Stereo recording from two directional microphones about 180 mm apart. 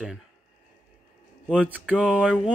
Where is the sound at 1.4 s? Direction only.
10° right (ahead or behind).